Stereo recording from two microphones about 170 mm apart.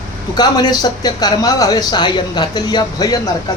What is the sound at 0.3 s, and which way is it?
A man's voice, 25° left (ahead or behind).